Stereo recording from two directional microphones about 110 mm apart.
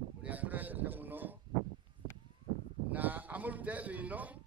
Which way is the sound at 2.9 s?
15° right (ahead or behind).